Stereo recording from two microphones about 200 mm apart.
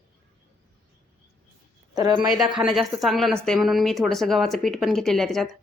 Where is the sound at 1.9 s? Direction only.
20° right (ahead or behind).